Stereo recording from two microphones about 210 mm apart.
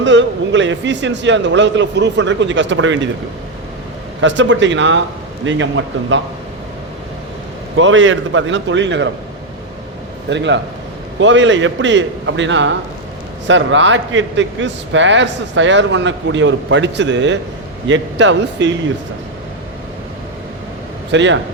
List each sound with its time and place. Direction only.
0.0 s speech: 60° right (ahead or behind)
4.2 s speech: 60° right (ahead or behind)
7.8 s speech: 65° right (ahead or behind)
10.2 s speech: 60° right (ahead or behind)
21.1 s speech: 60° right (ahead or behind)